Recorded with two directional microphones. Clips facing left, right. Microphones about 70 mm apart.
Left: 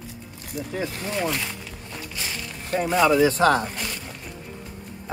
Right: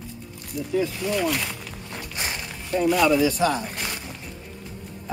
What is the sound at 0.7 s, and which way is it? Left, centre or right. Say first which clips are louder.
Speech: right 6 dB; left.